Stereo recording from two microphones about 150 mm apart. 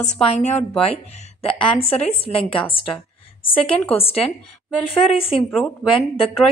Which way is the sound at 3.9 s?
40° left (ahead or behind).